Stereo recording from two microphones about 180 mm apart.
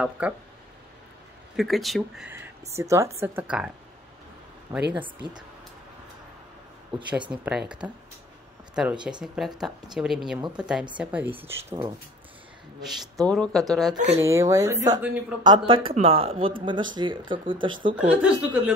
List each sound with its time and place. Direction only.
0.2 s speech: 5° right (ahead or behind)
1.6 s speech: centre (ahead or behind)
2.3 s speech: 15° right (ahead or behind)
4.7 s speech: 20° right (ahead or behind)
6.9 s speech: 10° right (ahead or behind)
13.3 s speech: 5° left (ahead or behind)
14.2 s speech: 15° right (ahead or behind)
15.4 s speech: 25° right (ahead or behind)
17.9 s speech: 10° right (ahead or behind)